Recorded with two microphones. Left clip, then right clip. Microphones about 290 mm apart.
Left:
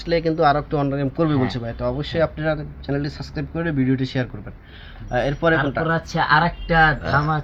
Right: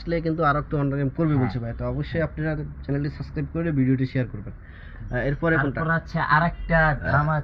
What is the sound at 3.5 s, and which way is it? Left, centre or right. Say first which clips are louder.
Speech: left 2 dB; centre.